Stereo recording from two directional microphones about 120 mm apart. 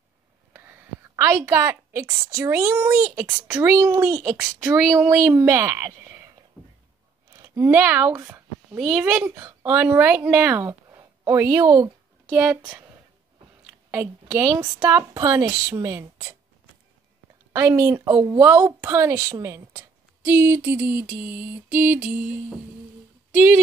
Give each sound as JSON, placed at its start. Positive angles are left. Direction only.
{"t": 0.5, "sound": "a sound", "side_deg": -15}
{"t": 2.3, "sound": "speech", "side_deg": -25}
{"t": 7.3, "sound": "speech", "side_deg": -25}
{"t": 8.7, "sound": "a woman's voice", "side_deg": -5}
{"t": 12.3, "sound": "a sound", "side_deg": -10}
{"t": 13.7, "sound": "a woman's voice", "side_deg": -15}
{"t": 17.5, "sound": "a woman's voice", "side_deg": -20}
{"t": 18.0, "sound": "speech", "side_deg": -35}
{"t": 18.4, "sound": "speech", "side_deg": -10}
{"t": 20.2, "sound": "a sound", "side_deg": -20}
{"t": 23.3, "sound": "speech", "side_deg": -15}